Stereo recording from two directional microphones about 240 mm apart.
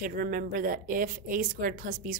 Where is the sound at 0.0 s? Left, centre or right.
Right.